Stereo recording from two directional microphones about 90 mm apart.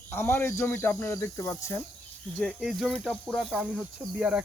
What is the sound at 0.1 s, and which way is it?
Speech, 25° left (ahead or behind).